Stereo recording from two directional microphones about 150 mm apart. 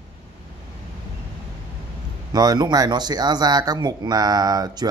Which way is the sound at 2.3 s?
30° right (ahead or behind).